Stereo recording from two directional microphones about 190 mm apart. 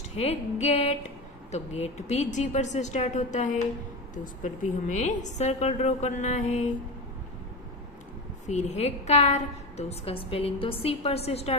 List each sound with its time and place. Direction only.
0.1 s a woman's voice: 35° left (ahead or behind)
8.5 s a woman's voice: 35° left (ahead or behind)